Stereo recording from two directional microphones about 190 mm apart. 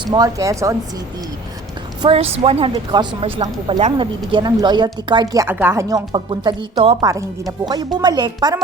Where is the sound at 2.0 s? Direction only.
30° right (ahead or behind).